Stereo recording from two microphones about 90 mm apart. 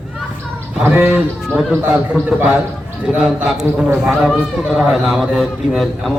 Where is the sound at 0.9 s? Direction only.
15° right (ahead or behind).